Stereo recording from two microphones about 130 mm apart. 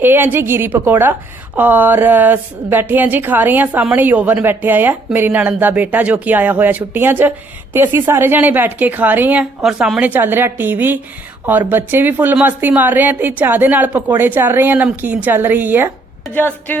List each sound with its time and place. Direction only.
0.0 s speech: 15° right (ahead or behind)
16.3 s speech: 15° left (ahead or behind)